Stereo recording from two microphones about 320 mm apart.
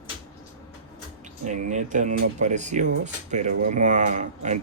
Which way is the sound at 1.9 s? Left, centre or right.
Right.